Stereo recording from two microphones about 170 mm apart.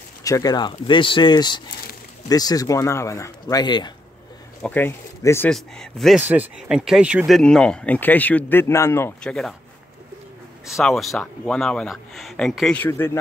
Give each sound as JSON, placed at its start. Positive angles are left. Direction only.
{"t": 0.2, "sound": "speech", "side_deg": 20}
{"t": 4.6, "sound": "speech", "side_deg": 10}
{"t": 5.5, "sound": "speech", "side_deg": 0}
{"t": 9.3, "sound": "speech", "side_deg": 5}
{"t": 10.7, "sound": "speech", "side_deg": 0}